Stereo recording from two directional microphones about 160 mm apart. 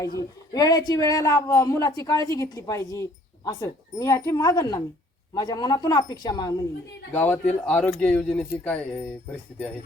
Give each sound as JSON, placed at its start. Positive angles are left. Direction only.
{"t": 0.0, "sound": "a woman's voice", "side_deg": 20}
{"t": 7.1, "sound": "speech", "side_deg": 10}